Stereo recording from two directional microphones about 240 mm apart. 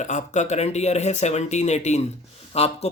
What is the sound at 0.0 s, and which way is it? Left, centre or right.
Speech, left.